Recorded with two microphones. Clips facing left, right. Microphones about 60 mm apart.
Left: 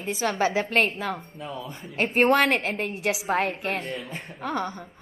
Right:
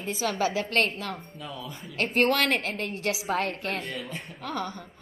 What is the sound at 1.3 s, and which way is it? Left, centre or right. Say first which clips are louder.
Speech: left 3 dB; left.